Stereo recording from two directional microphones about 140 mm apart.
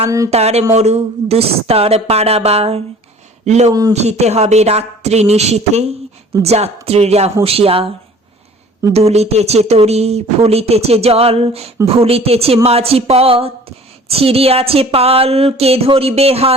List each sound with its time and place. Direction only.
0.3 s speech: 50° right (ahead or behind)
3.7 s speech: 25° right (ahead or behind)
3.9 s speech: 50° right (ahead or behind)
8.9 s speech: 50° right (ahead or behind)